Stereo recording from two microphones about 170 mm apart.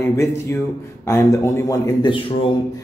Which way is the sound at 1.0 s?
15° left (ahead or behind).